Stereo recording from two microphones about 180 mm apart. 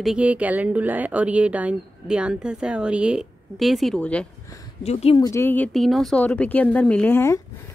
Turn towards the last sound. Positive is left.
turn(degrees=15)  # may be behind; listen again after turning